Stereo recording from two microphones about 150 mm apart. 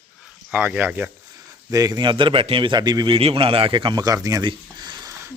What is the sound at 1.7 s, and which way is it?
A man's voice, 25° right (ahead or behind).